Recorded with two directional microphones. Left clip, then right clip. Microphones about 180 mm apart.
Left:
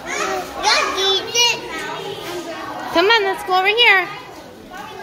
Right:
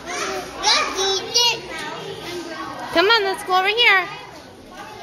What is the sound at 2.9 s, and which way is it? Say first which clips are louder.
A woman's voice: left 2 dB; 5° right (ahead or behind).